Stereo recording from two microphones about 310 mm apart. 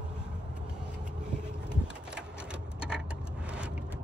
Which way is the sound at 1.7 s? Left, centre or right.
Centre.